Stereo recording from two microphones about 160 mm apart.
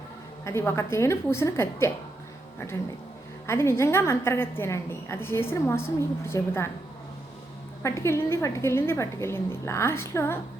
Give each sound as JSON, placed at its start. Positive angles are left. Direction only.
{"t": 0.4, "sound": "a woman's voice", "side_deg": 15}
{"t": 3.4, "sound": "a woman's voice", "side_deg": 15}
{"t": 7.8, "sound": "a woman's voice", "side_deg": 15}